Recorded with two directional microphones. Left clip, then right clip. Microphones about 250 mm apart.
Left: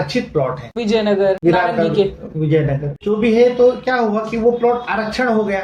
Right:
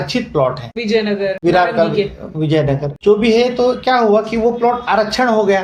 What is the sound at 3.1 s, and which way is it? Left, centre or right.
Speech, right.